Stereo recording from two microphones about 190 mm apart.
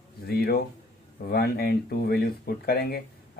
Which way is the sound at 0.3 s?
55° left (ahead or behind).